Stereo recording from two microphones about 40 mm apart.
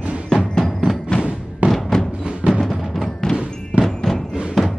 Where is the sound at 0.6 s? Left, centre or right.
Centre.